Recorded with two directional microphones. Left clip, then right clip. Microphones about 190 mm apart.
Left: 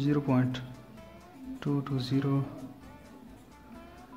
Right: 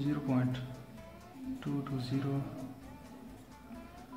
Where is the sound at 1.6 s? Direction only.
55° left (ahead or behind).